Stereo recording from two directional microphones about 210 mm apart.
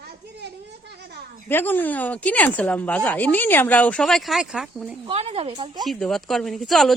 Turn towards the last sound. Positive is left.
turn(degrees=0)  # may be behind; listen again after turning